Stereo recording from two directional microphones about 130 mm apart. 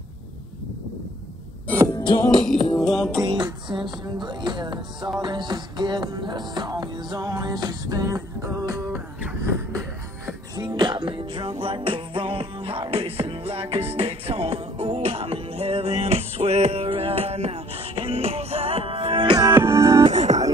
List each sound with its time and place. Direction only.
2.0 s music: 40° left (ahead or behind)
2.8 s music: centre (ahead or behind)
3.3 s music: 35° right (ahead or behind)
10.5 s music: 30° right (ahead or behind); by 19.3 s 45° right (ahead or behind)
19.5 s music: 20° right (ahead or behind)
20.0 s music: 60° right (ahead or behind)